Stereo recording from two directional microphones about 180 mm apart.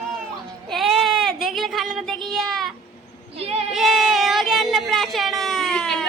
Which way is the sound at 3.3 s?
35° right (ahead or behind).